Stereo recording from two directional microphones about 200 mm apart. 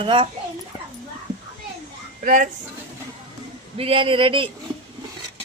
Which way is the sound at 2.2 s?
40° right (ahead or behind).